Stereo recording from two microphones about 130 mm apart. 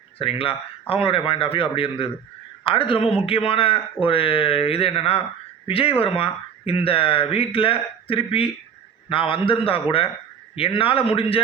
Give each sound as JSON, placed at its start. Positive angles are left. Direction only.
{"t": 0.2, "sound": "a man's voice", "side_deg": 45}